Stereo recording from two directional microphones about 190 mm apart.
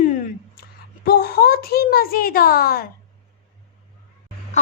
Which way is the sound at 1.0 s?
55° left (ahead or behind).